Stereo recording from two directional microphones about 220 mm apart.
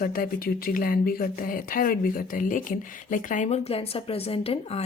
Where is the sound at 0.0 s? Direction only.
40° left (ahead or behind).